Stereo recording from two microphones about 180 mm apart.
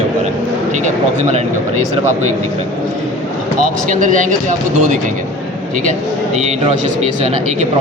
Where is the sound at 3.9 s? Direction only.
45° right (ahead or behind).